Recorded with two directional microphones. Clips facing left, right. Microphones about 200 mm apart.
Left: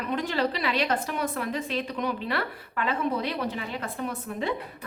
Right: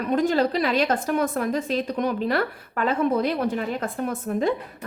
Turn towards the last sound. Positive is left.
turn(degrees=-45)  # may be behind; listen again after turning